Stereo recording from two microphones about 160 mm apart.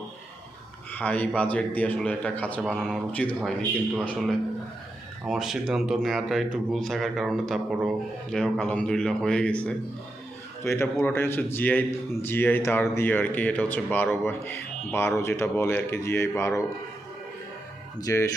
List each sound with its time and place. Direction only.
0.9 s speech: 10° left (ahead or behind)
10.6 s speech: 15° left (ahead or behind)
18.0 s speech: 20° left (ahead or behind)